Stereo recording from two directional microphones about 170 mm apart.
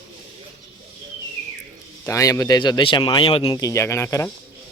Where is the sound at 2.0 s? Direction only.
20° left (ahead or behind).